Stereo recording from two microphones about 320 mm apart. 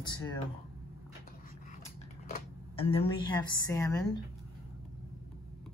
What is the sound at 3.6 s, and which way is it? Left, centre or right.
Speech, centre.